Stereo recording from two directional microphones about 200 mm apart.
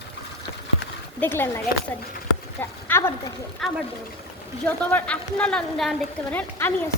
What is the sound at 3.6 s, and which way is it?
A woman's voice, centre (ahead or behind).